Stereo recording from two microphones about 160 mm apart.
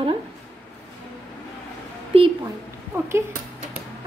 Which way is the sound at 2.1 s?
35° right (ahead or behind).